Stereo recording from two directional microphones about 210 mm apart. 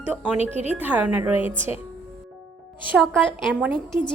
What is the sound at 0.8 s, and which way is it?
Speech, 5° right (ahead or behind).